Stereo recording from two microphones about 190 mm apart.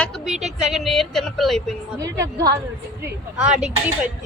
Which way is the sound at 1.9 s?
15° right (ahead or behind).